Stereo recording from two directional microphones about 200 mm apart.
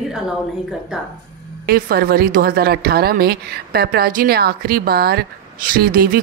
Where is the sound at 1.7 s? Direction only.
50° right (ahead or behind).